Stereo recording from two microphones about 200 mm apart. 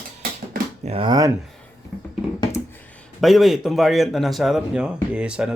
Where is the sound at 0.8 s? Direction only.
30° right (ahead or behind).